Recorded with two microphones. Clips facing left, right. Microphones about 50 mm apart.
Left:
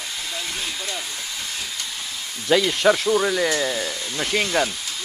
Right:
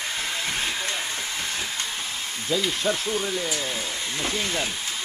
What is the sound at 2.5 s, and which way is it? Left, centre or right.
Speech, left.